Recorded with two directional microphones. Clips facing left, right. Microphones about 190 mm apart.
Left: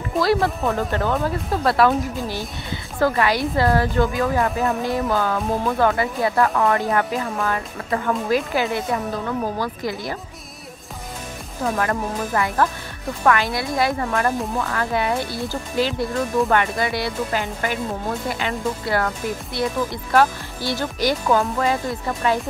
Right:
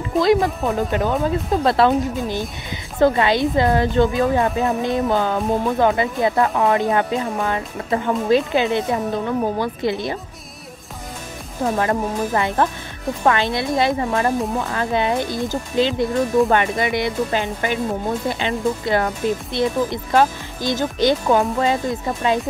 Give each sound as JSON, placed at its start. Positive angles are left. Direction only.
{"t": 0.2, "sound": "a woman's voice", "side_deg": -15}
{"t": 11.6, "sound": "a woman's voice", "side_deg": -25}